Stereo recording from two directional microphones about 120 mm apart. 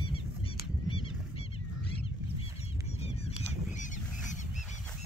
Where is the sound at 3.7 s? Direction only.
90° left.